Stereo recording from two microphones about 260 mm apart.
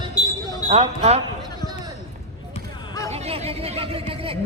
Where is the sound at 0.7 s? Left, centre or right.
Right.